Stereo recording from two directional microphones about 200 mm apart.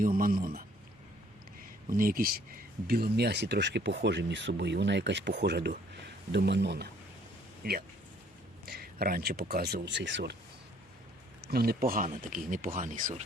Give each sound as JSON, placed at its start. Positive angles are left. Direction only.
{"t": 0.0, "sound": "a man's voice", "side_deg": -45}
{"t": 1.9, "sound": "speech", "side_deg": -45}
{"t": 11.4, "sound": "speech", "side_deg": -50}